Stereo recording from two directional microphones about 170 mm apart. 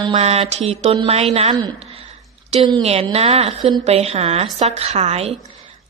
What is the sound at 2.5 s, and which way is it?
Speech, 35° right (ahead or behind).